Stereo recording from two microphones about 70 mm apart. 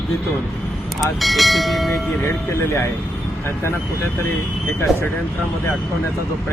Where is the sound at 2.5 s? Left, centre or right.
Left.